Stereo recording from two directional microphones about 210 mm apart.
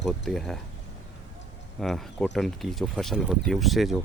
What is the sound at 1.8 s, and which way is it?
Speech, centre (ahead or behind).